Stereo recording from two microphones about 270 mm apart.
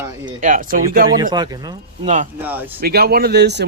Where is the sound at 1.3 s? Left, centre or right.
Centre.